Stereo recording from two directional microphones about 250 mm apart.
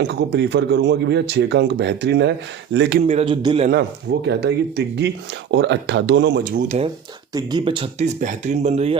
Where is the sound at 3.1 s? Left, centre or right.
Right.